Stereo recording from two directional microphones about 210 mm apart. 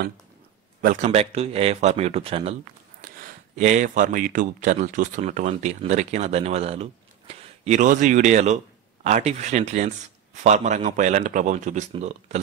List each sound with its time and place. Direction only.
0.7 s speech: 35° right (ahead or behind)
3.5 s speech: 35° right (ahead or behind)